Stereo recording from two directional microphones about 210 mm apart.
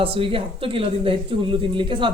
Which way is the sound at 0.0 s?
25° right (ahead or behind).